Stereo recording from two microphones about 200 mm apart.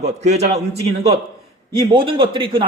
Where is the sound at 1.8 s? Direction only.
25° right (ahead or behind).